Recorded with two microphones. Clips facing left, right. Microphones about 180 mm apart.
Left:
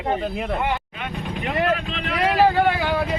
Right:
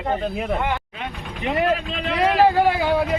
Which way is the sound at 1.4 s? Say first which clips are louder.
Right 2 dB; 20° right (ahead or behind).